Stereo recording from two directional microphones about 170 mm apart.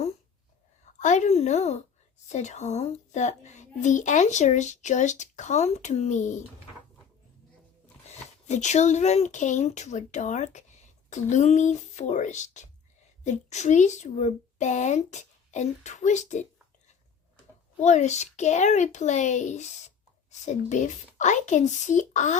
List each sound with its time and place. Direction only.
0.9 s a child's voice: 45° left (ahead or behind)
8.4 s a child's voice: 45° left (ahead or behind)
17.7 s a child's voice: 45° left (ahead or behind)